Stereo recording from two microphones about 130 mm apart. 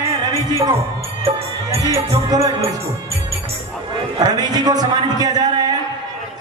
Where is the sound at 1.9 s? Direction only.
25° right (ahead or behind).